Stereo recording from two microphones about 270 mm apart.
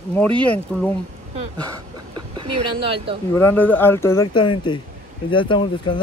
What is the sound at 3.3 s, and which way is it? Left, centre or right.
Speech, centre.